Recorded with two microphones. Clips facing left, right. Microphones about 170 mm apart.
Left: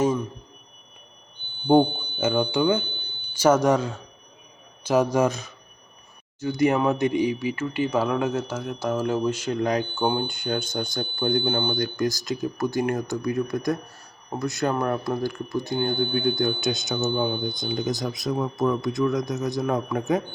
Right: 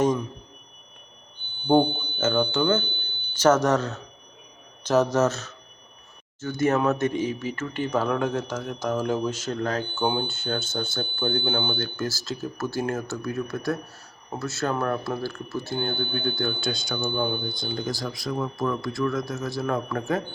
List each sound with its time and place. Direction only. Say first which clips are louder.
0.0 s a sound: even; 10° left (ahead or behind)
1.7 s speech: left 2 dB; 15° left (ahead or behind)
17.1 s speech: left 1 dB; 10° left (ahead or behind)